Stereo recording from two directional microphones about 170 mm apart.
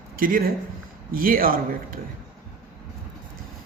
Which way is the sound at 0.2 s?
60° right (ahead or behind).